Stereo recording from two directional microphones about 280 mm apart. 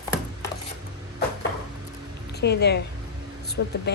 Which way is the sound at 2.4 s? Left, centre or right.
Left.